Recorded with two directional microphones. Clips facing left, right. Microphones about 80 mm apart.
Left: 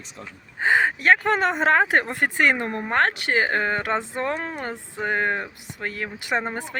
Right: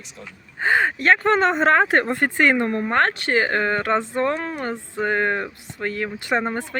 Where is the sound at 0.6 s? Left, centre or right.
Centre.